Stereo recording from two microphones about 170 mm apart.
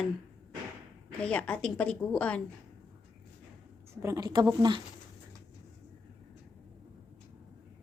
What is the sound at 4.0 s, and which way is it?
Speech, 20° right (ahead or behind).